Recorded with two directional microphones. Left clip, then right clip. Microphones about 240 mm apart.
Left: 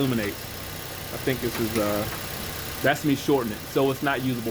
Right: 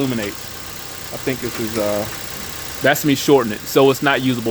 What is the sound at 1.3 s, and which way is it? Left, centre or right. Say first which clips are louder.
Speech: right 4 dB; right.